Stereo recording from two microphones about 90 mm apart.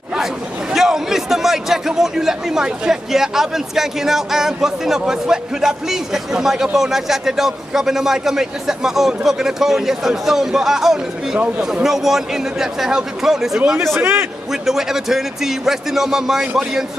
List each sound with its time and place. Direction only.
0.7 s a man's voice: 5° right (ahead or behind)
13.9 s a man's voice: 25° right (ahead or behind)
14.5 s a man's voice: 5° right (ahead or behind)